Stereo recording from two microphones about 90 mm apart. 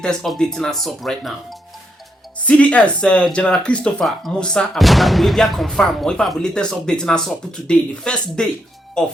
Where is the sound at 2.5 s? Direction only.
15° left (ahead or behind).